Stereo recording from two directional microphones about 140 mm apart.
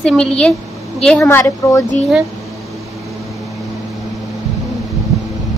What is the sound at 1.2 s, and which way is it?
Speech, 20° left (ahead or behind).